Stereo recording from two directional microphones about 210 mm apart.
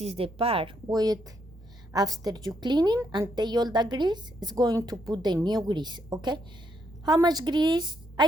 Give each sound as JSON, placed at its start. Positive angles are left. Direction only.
{"t": 0.0, "sound": "a woman's voice", "side_deg": -30}